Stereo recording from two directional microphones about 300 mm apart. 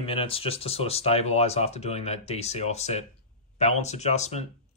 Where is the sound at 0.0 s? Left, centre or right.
Centre.